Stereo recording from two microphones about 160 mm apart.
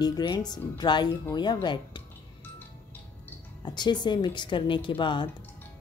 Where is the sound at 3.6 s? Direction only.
25° left (ahead or behind).